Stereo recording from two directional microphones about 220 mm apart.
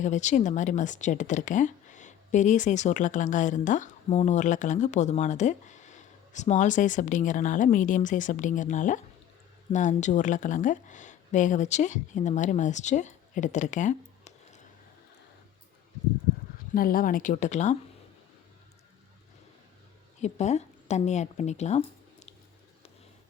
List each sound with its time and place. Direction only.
0.0 s speech: 30° left (ahead or behind)
16.7 s speech: 40° left (ahead or behind)
20.2 s speech: 30° left (ahead or behind)